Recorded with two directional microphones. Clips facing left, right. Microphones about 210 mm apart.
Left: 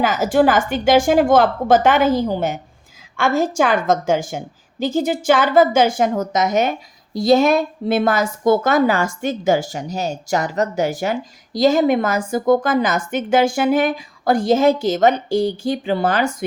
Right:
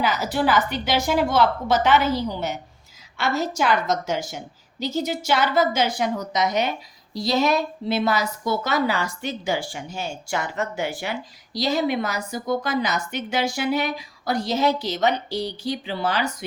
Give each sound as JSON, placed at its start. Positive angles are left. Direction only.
{"t": 0.0, "sound": "a woman's voice", "side_deg": 50}